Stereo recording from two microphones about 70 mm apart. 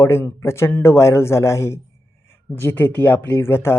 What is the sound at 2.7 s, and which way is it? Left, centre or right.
Speech, left.